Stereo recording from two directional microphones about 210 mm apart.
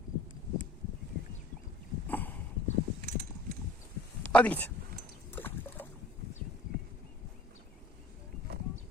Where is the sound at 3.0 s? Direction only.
45° right (ahead or behind).